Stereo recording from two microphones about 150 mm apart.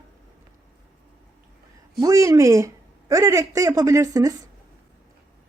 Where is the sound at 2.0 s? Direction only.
20° right (ahead or behind).